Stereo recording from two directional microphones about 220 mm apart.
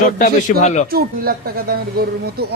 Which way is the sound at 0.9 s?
40° right (ahead or behind).